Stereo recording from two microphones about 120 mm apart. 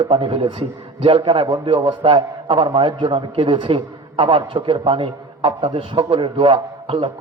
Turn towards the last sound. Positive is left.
turn(degrees=-50)  # may be behind; listen again after turning